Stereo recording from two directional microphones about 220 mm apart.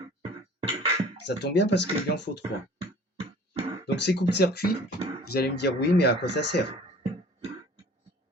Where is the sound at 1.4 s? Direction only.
50° left (ahead or behind).